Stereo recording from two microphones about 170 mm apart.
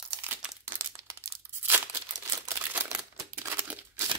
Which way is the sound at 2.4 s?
15° right (ahead or behind).